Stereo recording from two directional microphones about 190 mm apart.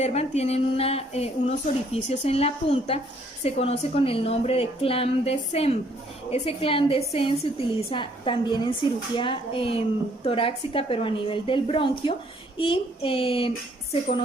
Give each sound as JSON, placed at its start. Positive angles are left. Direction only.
{"t": 0.0, "sound": "a woman's voice", "side_deg": 35}